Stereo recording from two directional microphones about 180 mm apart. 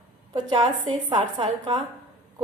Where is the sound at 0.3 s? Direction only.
25° right (ahead or behind).